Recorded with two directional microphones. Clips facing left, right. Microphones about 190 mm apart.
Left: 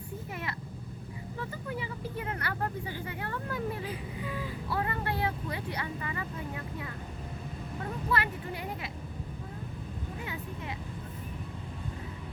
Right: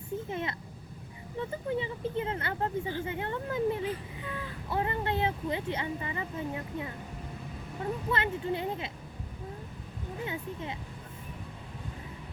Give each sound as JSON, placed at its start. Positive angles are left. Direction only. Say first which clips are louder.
{"t": 0.3, "sound": "speech", "louder": "right 4 dB", "side_deg": -25}
{"t": 8.1, "sound": "speech", "louder": "right 1 dB", "side_deg": -25}
{"t": 10.2, "sound": "speech", "louder": "right 5 dB", "side_deg": -25}